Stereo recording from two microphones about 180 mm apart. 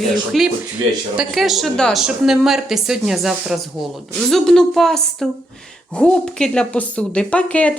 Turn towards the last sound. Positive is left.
turn(degrees=5)  # may be behind; listen again after turning